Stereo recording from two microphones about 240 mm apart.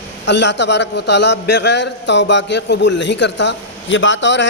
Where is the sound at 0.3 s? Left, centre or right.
Left.